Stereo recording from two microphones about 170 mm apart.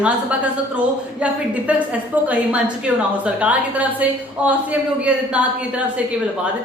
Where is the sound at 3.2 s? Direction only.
10° right (ahead or behind).